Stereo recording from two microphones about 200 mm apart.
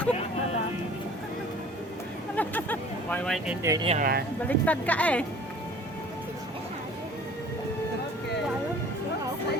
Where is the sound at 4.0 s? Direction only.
50° right (ahead or behind).